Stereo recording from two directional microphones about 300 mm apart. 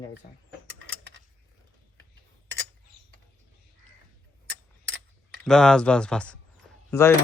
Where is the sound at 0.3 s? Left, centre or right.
Left.